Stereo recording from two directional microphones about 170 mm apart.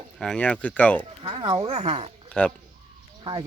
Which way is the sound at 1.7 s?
35° right (ahead or behind).